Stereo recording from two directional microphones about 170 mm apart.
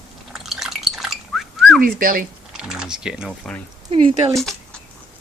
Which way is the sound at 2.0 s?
55° right (ahead or behind).